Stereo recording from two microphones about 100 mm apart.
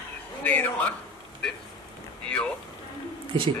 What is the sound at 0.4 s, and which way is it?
Speech, 15° left (ahead or behind).